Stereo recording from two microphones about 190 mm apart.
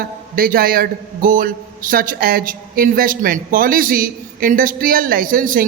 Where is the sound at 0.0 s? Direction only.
50° right (ahead or behind).